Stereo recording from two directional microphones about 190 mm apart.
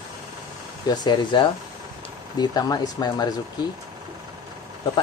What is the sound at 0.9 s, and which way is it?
Speech, 25° left (ahead or behind).